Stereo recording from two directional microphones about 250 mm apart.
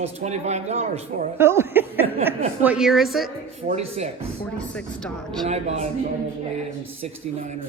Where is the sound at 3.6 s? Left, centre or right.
Right.